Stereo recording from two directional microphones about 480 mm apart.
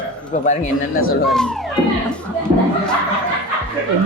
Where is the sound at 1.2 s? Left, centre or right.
Centre.